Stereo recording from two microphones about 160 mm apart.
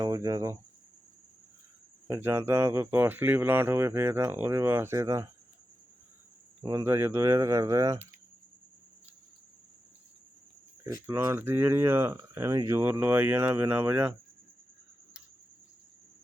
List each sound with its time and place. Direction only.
0.0 s speech: 20° right (ahead or behind)
2.0 s speech: 15° right (ahead or behind)
6.7 s speech: 15° right (ahead or behind)
11.0 s speech: 15° right (ahead or behind)